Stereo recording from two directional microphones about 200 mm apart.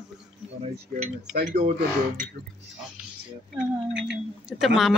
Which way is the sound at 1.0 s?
50° right (ahead or behind).